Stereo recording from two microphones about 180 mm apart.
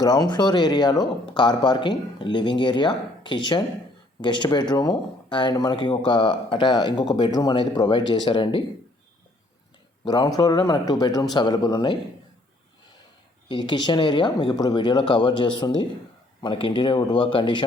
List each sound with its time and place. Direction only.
0.0 s speech: 20° left (ahead or behind)
10.0 s speech: 25° left (ahead or behind)
13.5 s speech: 25° left (ahead or behind)